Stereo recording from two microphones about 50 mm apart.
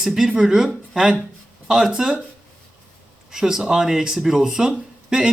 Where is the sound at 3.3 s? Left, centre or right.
Centre.